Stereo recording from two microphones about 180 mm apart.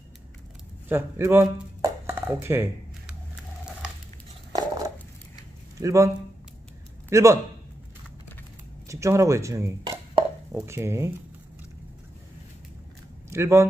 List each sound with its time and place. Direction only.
0.8 s a sound: 15° right (ahead or behind)
4.6 s a sound: 20° right (ahead or behind)
5.8 s a man's voice: 15° right (ahead or behind)
8.8 s chopping: 15° right (ahead or behind)
10.5 s speech: 15° right (ahead or behind)
13.3 s speech: 15° right (ahead or behind)